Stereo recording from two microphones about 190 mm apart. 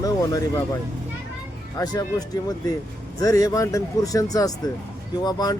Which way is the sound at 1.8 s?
20° left (ahead or behind).